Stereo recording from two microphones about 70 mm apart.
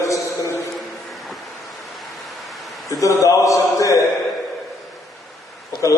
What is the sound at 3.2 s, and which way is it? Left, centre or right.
Mantra, left.